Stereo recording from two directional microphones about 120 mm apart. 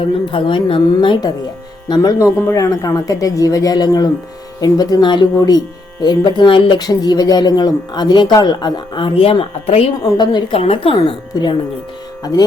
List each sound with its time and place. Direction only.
0.3 s a woman's voice: 45° left (ahead or behind)
1.9 s speech: 35° left (ahead or behind)
2.1 s a woman's voice: 20° left (ahead or behind); by 9.9 s 55° left (ahead or behind)
10.0 s speech: 35° left (ahead or behind)
10.5 s a woman's voice: 55° left (ahead or behind)
11.3 s a woman's voice: 30° left (ahead or behind)